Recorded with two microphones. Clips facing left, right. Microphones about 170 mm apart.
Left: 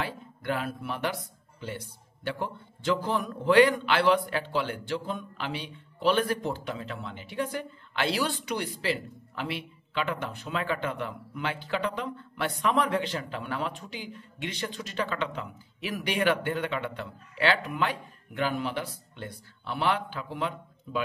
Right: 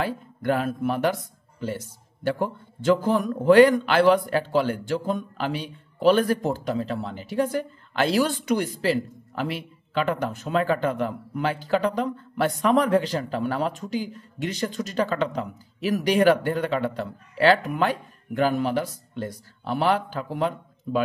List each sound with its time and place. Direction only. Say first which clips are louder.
0.0 s a man's voice: right 7 dB; 45° right (ahead or behind)